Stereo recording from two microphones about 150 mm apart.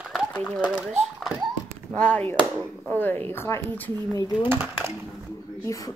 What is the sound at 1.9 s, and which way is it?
Speech, 10° left (ahead or behind).